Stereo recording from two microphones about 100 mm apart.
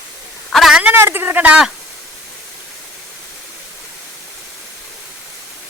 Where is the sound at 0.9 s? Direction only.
25° right (ahead or behind).